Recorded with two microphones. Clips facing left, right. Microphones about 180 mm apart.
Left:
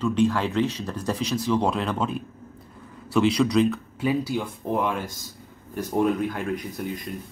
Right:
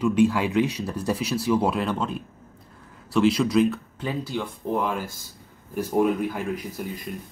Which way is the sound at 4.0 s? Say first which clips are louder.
Left 4 dB; 10° left (ahead or behind).